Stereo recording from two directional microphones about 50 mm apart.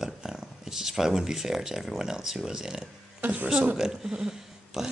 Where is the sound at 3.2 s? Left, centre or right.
Right.